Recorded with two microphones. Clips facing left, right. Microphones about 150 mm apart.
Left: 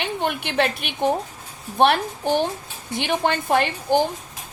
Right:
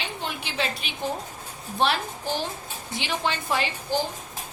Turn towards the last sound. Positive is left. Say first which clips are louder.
# left 7 dB
turn(degrees=55)  # may be behind; listen again after turning